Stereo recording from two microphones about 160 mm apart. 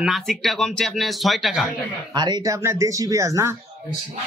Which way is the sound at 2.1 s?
25° right (ahead or behind).